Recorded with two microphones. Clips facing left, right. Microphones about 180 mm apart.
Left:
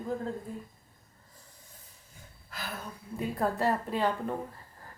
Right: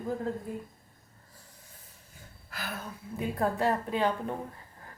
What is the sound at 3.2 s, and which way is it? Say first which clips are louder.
Speech: right 1 dB; centre (ahead or behind).